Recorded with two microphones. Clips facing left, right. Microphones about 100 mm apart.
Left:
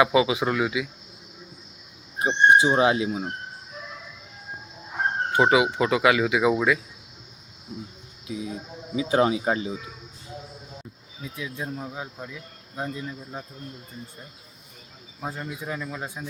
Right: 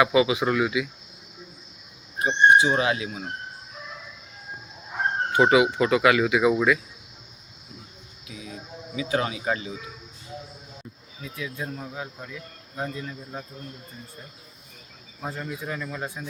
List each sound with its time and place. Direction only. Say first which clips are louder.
0.0 s speech: even; 25° left (ahead or behind)
2.2 s speech: even; 25° left (ahead or behind)
5.4 s speech: right 1 dB; 20° left (ahead or behind)
8.3 s speech: left 6 dB; 25° left (ahead or behind)
11.2 s speech: even; 20° left (ahead or behind)
15.2 s speech: even; 10° left (ahead or behind)